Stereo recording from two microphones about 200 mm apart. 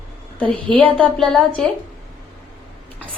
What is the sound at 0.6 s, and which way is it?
Speech, 25° right (ahead or behind).